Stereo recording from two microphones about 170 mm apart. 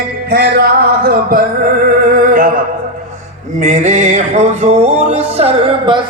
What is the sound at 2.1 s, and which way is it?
Music, 50° right (ahead or behind).